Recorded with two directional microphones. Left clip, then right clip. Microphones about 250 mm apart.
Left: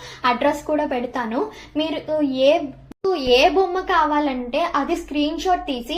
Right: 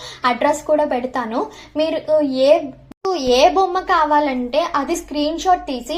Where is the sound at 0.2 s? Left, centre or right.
Centre.